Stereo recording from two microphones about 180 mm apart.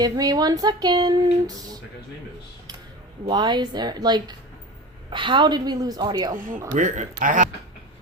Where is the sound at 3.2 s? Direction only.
25° right (ahead or behind).